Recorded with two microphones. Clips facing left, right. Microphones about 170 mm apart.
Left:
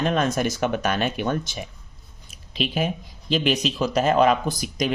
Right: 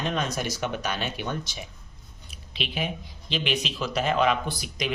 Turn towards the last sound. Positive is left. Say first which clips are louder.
# left 6 dB
turn(degrees=45)  # may be behind; listen again after turning